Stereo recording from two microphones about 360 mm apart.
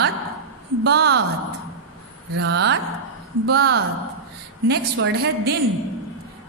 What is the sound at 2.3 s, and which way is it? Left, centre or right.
A woman's voice, right.